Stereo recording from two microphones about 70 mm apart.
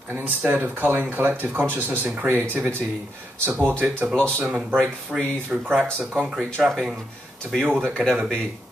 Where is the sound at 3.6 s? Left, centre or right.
Right.